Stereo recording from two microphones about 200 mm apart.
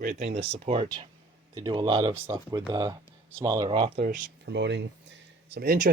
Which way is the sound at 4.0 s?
40° right (ahead or behind).